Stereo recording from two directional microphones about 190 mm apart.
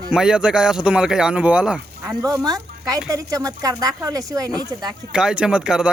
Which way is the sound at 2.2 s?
20° right (ahead or behind).